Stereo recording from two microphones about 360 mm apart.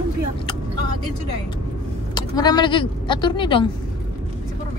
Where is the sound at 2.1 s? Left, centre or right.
Centre.